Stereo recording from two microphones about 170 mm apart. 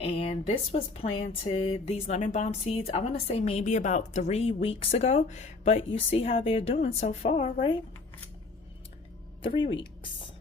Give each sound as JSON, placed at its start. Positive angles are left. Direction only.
{"t": 0.0, "sound": "speech", "side_deg": 35}
{"t": 9.4, "sound": "speech", "side_deg": 30}